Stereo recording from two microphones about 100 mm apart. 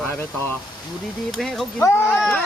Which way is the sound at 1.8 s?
25° left (ahead or behind).